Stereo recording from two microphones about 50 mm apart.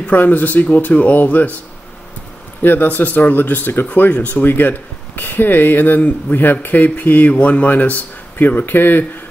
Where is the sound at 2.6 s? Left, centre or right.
Left.